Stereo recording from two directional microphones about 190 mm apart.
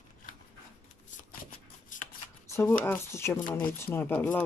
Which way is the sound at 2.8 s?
15° left (ahead or behind).